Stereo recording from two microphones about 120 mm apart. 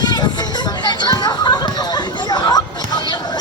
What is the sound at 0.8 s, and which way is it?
Chatter, 35° left (ahead or behind).